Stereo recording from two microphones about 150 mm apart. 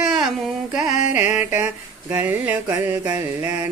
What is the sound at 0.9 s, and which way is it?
Music, 55° left (ahead or behind).